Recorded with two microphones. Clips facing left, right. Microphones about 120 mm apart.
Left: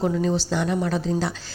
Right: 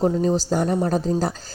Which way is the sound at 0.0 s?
35° right (ahead or behind).